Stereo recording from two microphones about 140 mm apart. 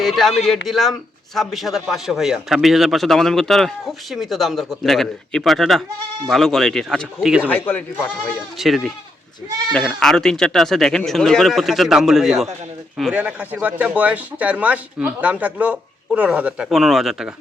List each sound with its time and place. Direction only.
0.0 s speech: centre (ahead or behind)
7.4 s speech: 15° left (ahead or behind)
8.3 s speech: centre (ahead or behind)